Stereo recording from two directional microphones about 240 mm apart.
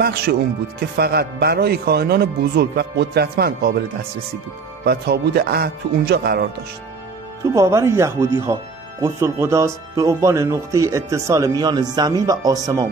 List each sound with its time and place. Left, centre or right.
0.0 s a man's voice: right
4.8 s a man's voice: right
7.5 s speech: centre